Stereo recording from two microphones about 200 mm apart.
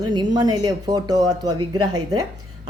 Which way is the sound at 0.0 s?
20° right (ahead or behind).